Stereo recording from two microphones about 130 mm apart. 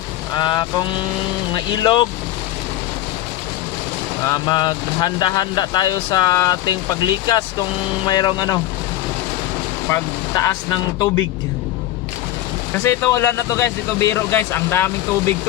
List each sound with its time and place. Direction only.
0.3 s speech: 30° left (ahead or behind)
4.2 s speech: 30° left (ahead or behind)
9.9 s speech: 25° left (ahead or behind)
12.8 s speech: 25° left (ahead or behind)